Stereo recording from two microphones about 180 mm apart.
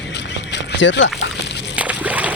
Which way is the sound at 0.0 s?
75° left (ahead or behind).